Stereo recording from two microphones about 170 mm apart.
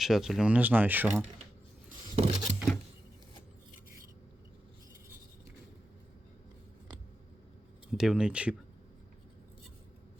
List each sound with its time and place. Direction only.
0.0 s speech: centre (ahead or behind)
2.1 s a sound: 35° right (ahead or behind)
7.9 s speech: 5° right (ahead or behind)